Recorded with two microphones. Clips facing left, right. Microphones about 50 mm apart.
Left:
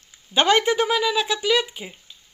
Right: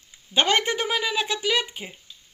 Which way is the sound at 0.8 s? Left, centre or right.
Centre.